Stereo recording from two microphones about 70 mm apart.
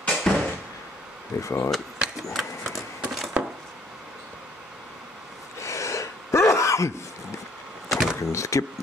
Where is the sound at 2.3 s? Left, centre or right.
Centre.